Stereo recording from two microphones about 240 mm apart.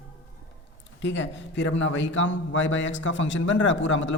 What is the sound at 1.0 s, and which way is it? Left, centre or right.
A man's voice, left.